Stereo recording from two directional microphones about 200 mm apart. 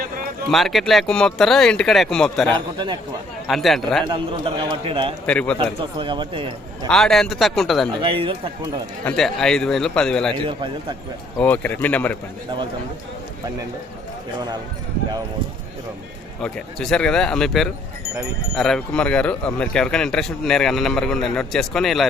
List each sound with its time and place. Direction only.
0.5 s speech: centre (ahead or behind)
2.5 s a man's voice: 25° right (ahead or behind)
3.4 s speech: centre (ahead or behind)
4.0 s a man's voice: 25° right (ahead or behind)
5.2 s speech: 5° left (ahead or behind)
5.5 s a man's voice: 25° right (ahead or behind)
6.8 s speech: centre (ahead or behind)
8.0 s a man's voice: 25° right (ahead or behind)
9.0 s speech: centre (ahead or behind)
10.4 s a man's voice: 25° right (ahead or behind)
11.3 s speech: 10° left (ahead or behind)
16.4 s speech: 5° left (ahead or behind)